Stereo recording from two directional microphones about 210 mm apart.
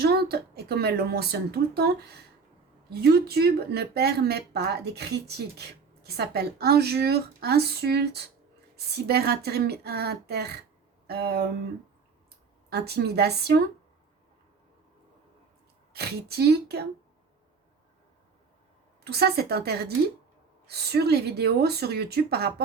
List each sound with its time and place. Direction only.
0.0 s speech: 50° right (ahead or behind)
12.7 s speech: 50° right (ahead or behind)
15.9 s speech: 50° right (ahead or behind)
19.0 s speech: 50° right (ahead or behind)